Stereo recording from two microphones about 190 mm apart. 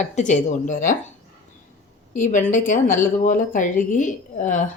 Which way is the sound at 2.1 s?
40° left (ahead or behind).